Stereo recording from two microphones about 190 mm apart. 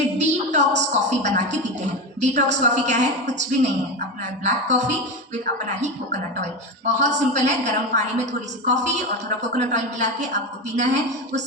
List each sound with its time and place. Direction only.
0.2 s a sound: 40° right (ahead or behind)
2.2 s a woman's voice: 40° right (ahead or behind)
7.0 s a woman's voice: 40° right (ahead or behind)